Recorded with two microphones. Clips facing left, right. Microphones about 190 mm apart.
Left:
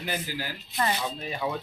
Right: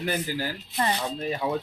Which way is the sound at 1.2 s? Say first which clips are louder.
Right 4 dB; 35° right (ahead or behind).